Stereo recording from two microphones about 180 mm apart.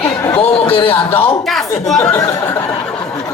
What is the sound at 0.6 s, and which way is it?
Speech, 30° left (ahead or behind).